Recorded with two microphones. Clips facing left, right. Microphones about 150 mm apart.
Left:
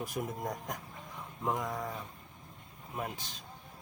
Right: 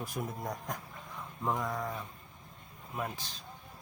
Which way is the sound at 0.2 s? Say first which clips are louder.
Left 1 dB; 15° left (ahead or behind).